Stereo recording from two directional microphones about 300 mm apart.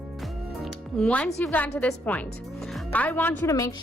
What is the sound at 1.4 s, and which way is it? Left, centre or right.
A woman's voice, centre.